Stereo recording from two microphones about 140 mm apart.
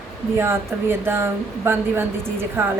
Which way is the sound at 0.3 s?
15° right (ahead or behind).